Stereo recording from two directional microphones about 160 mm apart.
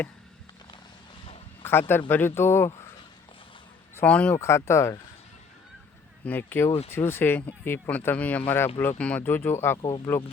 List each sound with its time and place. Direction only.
1.9 s speech: 10° left (ahead or behind)
3.9 s speech: 10° left (ahead or behind)
6.2 s speech: 10° left (ahead or behind)